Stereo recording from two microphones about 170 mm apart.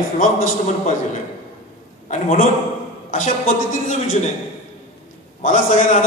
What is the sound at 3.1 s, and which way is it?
Speech, 50° left (ahead or behind).